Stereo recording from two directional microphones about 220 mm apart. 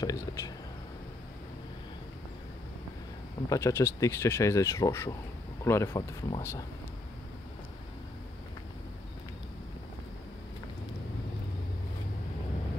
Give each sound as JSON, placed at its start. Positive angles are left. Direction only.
{"t": 0.0, "sound": "speech", "side_deg": 15}
{"t": 3.4, "sound": "speech", "side_deg": 15}